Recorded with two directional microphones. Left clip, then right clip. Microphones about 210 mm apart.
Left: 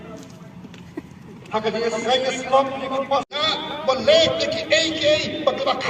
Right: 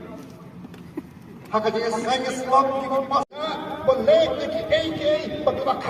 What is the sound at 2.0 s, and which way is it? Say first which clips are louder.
Speech: left 3 dB; 70° right (ahead or behind).